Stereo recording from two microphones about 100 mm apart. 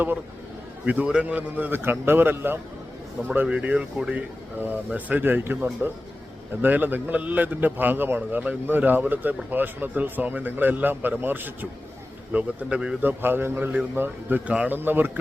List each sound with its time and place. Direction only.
0.9 s a man's voice: 10° right (ahead or behind)